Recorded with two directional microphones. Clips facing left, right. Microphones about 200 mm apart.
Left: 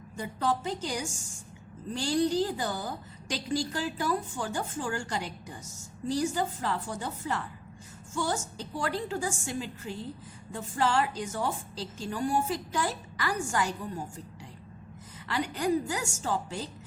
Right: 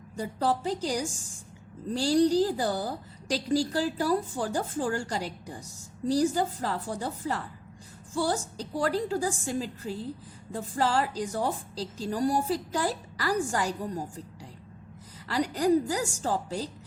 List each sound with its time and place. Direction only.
0.2 s a woman's voice: 35° right (ahead or behind)
15.3 s a woman's voice: 35° right (ahead or behind)